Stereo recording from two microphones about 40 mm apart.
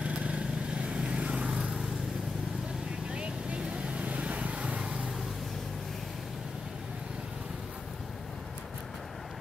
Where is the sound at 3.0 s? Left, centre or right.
Right.